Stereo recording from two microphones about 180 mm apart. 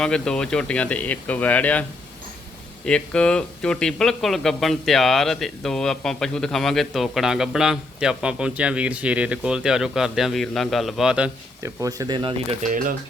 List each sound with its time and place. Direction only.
0.0 s speech: 5° left (ahead or behind)
2.8 s speech: 5° left (ahead or behind)
11.6 s speech: 20° right (ahead or behind)
12.6 s speech: 45° right (ahead or behind)